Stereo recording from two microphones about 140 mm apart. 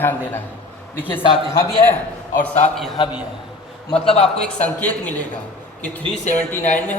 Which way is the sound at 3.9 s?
45° left (ahead or behind).